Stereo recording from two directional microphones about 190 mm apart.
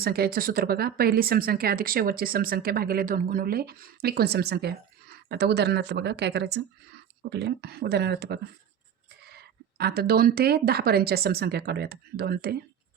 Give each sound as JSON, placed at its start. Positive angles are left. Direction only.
{"t": 0.0, "sound": "speech", "side_deg": -55}